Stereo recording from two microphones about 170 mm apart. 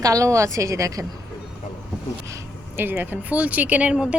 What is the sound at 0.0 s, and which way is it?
A woman's voice, 20° right (ahead or behind).